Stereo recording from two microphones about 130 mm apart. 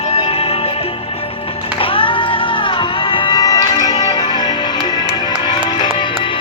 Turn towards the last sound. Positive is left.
turn(degrees=35)  # may be behind; listen again after turning